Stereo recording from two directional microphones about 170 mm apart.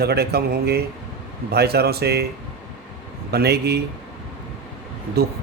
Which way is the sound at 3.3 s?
70° right (ahead or behind).